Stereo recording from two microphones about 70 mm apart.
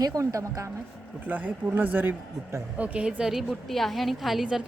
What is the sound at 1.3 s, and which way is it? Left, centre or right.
A woman's voice, right.